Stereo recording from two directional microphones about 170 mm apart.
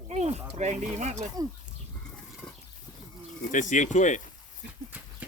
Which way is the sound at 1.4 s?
20° right (ahead or behind).